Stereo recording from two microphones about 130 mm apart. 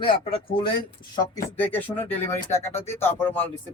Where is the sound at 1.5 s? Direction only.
15° left (ahead or behind).